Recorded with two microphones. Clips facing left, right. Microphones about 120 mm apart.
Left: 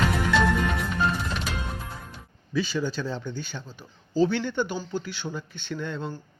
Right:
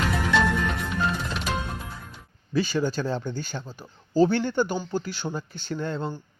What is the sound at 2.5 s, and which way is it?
Speech, 45° right (ahead or behind).